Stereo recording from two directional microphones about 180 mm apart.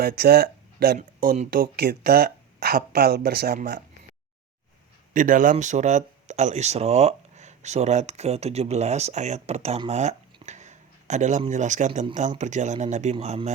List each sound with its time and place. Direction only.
0.0 s speech: 60° right (ahead or behind)
0.9 s speech: 45° right (ahead or behind)
5.1 s speech: 45° right (ahead or behind)